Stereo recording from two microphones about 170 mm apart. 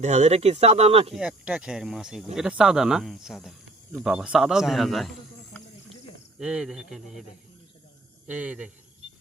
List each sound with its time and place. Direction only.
0.0 s speech: 40° right (ahead or behind)
1.1 s a man's voice: 5° right (ahead or behind)
6.4 s a man's voice: 5° right (ahead or behind)
8.3 s speech: 10° right (ahead or behind)